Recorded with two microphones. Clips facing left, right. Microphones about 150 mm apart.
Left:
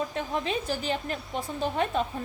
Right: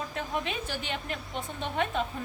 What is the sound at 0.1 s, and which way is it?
A woman's voice, 35° left (ahead or behind).